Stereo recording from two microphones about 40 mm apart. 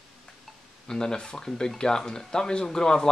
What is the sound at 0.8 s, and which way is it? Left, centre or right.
Speech, centre.